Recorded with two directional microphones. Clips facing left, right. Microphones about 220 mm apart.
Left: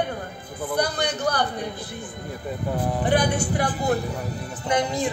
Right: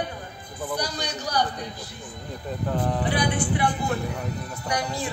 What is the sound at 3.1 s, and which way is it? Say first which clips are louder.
Speech: left 3 dB; 45° left (ahead or behind).